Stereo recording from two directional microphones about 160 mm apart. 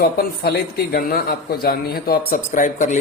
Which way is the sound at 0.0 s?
75° left (ahead or behind).